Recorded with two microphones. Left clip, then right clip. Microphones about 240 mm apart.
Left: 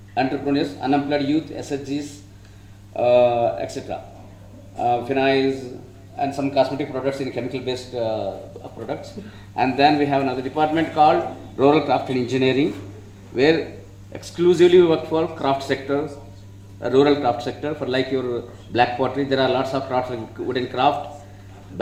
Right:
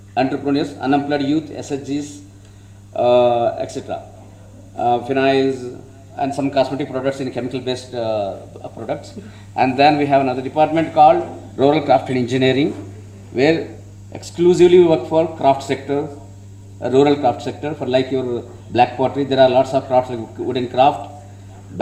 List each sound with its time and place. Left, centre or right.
0.1 s a man's voice: right